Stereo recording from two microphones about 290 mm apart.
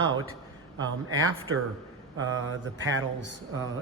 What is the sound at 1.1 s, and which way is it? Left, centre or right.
Speech, right.